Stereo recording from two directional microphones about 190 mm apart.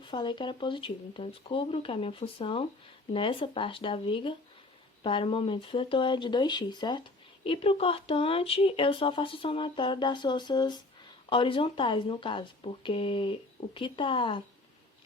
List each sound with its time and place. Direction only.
0.0 s speech: 25° left (ahead or behind)